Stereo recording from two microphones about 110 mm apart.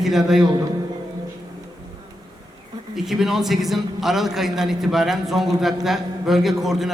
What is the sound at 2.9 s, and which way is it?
A man's voice, 5° right (ahead or behind).